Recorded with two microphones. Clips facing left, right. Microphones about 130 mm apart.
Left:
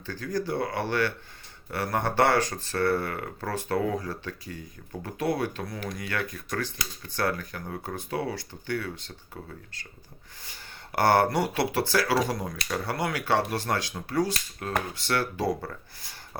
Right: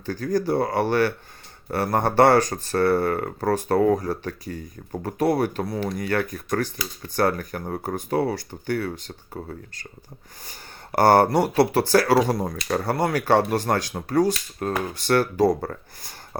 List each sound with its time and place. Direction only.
0.0 s speech: 40° right (ahead or behind)